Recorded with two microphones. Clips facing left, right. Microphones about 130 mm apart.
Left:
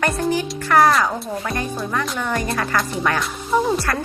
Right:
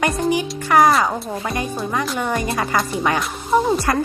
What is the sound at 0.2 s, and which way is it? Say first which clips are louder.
Speech: right 1 dB; 10° right (ahead or behind).